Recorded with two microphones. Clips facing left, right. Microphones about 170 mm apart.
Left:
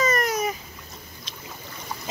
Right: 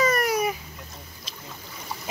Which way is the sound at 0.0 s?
10° right (ahead or behind).